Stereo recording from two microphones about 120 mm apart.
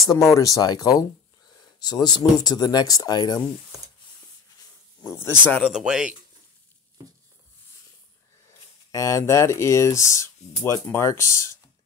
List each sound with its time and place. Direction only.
0.0 s speech: 25° left (ahead or behind)
5.6 s speech: 5° right (ahead or behind)
8.9 s speech: 25° left (ahead or behind)